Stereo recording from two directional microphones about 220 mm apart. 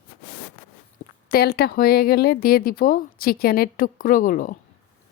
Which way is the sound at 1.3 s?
45° left (ahead or behind).